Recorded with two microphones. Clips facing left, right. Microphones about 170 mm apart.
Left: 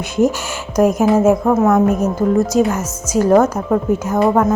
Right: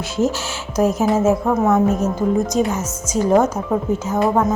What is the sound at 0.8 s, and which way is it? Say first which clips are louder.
A woman's voice: left 4 dB; 15° left (ahead or behind).